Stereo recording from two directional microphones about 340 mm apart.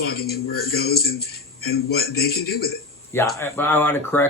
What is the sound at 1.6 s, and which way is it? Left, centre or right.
A man's voice, left.